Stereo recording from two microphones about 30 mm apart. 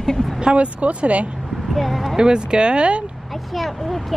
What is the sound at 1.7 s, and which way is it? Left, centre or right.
Speech, centre.